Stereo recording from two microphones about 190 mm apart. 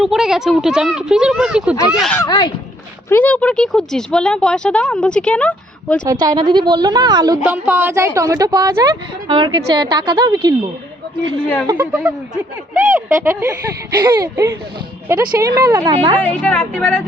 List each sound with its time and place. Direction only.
0.0 s speech: centre (ahead or behind)
2.2 s speech: 20° left (ahead or behind)
3.1 s speech: 10° left (ahead or behind)
6.1 s speech: 20° right (ahead or behind)
7.4 s speech: 10° right (ahead or behind)
11.4 s speech: 10° left (ahead or behind)
12.3 s speech: 15° right (ahead or behind)
16.2 s speech: 5° left (ahead or behind)